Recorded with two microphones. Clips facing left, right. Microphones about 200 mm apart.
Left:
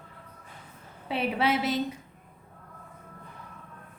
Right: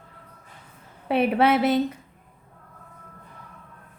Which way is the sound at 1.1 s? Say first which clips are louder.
Right 7 dB; 55° right (ahead or behind).